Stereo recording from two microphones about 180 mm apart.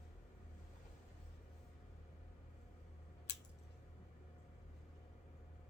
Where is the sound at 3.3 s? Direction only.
70° left (ahead or behind).